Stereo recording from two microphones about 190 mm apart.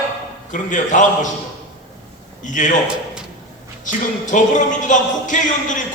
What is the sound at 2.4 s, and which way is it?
Speech, 40° left (ahead or behind).